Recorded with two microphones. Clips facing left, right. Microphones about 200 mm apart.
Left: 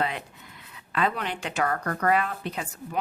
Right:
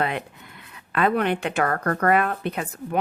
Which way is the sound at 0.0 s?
60° right (ahead or behind).